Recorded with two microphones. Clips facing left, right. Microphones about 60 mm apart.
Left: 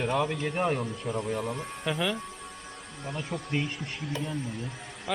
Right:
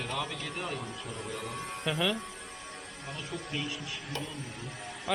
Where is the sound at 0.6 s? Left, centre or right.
Left.